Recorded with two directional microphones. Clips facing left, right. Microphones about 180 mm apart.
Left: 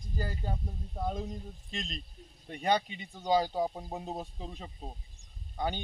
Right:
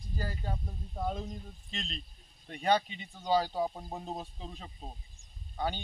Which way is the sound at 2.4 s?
15° left (ahead or behind).